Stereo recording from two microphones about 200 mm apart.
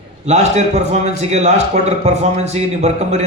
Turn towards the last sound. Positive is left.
turn(degrees=-35)  # may be behind; listen again after turning